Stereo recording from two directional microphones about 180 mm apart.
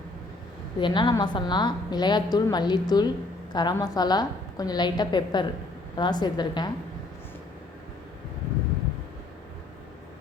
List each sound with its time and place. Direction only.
0.8 s a woman's voice: 25° left (ahead or behind)